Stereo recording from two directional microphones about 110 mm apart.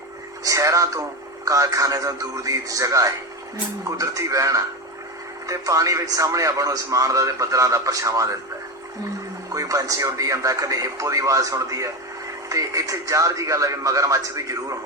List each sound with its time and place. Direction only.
0.4 s a man's voice: 30° right (ahead or behind)
9.5 s a man's voice: 30° right (ahead or behind)